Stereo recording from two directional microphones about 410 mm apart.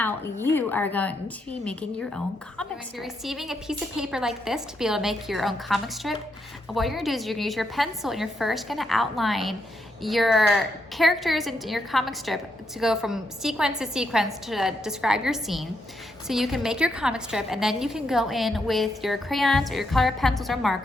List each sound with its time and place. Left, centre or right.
0.0 s a woman's voice: centre